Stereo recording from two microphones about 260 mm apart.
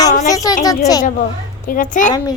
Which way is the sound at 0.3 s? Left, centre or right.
Centre.